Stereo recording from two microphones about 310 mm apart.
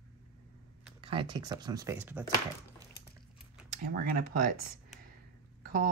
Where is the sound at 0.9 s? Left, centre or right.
Centre.